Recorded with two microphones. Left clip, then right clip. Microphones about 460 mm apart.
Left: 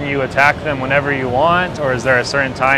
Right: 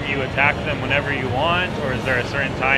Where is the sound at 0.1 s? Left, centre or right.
Left.